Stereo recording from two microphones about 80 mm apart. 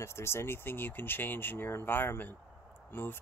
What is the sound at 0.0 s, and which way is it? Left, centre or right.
Speech, left.